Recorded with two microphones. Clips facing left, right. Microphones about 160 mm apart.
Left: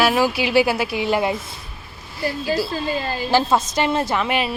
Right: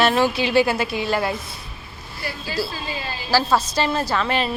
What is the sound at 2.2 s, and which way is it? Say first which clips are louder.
A woman's voice: left 5 dB; 45° left (ahead or behind).